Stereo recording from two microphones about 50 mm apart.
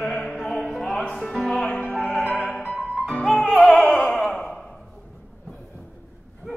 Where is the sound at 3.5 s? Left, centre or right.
Centre.